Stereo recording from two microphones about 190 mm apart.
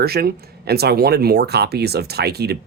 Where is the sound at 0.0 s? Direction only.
55° right (ahead or behind).